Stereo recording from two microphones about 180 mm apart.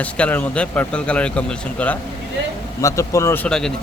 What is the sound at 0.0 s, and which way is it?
Speech, 10° left (ahead or behind).